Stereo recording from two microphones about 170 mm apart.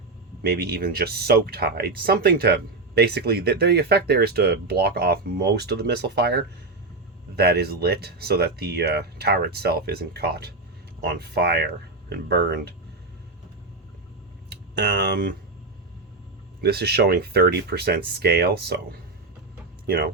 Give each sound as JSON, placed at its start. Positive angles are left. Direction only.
{"t": 0.4, "sound": "speech", "side_deg": -70}
{"t": 14.5, "sound": "tick", "side_deg": -80}
{"t": 16.6, "sound": "speech", "side_deg": -70}
{"t": 19.9, "sound": "speech", "side_deg": -60}